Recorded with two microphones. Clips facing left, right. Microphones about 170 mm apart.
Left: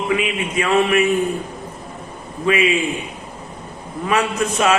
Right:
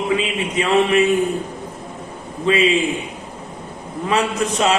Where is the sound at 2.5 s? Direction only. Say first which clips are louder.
Right 1 dB; 25° right (ahead or behind).